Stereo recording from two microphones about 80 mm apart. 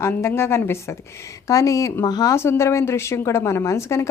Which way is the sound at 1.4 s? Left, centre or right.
Left.